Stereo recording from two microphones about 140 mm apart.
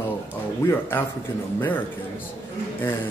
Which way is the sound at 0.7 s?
15° left (ahead or behind).